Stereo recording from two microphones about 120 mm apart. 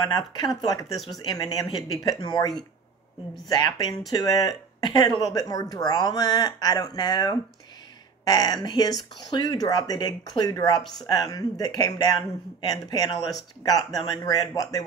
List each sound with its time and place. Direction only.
0.0 s speech: 35° left (ahead or behind)
0.9 s speech: centre (ahead or behind)
1.2 s speech: 35° left (ahead or behind)
3.6 s speech: 35° left (ahead or behind)
10.8 s speech: 5° left (ahead or behind)
11.1 s speech: 35° left (ahead or behind)